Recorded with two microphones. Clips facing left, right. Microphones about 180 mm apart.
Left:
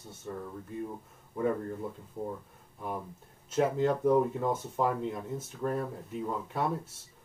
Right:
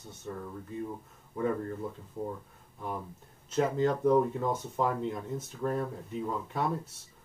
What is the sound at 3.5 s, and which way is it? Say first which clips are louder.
Speech: even; 5° left (ahead or behind).